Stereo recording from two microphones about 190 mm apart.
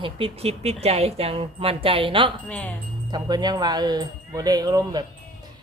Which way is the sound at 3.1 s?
20° right (ahead or behind).